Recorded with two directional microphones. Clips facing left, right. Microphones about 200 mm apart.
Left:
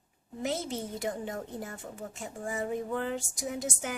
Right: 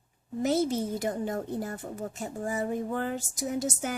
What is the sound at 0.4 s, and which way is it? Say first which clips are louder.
A woman's voice: right 7 dB; 40° right (ahead or behind).